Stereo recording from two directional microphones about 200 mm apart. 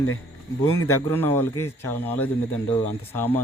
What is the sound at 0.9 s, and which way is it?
A man's voice, 10° left (ahead or behind).